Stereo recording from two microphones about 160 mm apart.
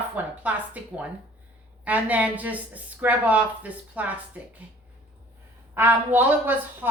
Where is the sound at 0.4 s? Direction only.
10° right (ahead or behind).